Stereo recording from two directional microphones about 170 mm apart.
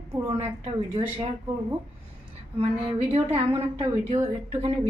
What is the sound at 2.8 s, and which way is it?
Speech, 35° right (ahead or behind).